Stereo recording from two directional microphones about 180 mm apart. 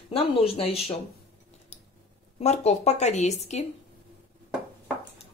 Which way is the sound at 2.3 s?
35° left (ahead or behind).